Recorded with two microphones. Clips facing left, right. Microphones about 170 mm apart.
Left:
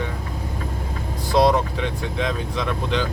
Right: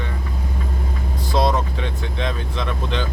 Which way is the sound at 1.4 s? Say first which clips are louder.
Left 3 dB; 10° left (ahead or behind).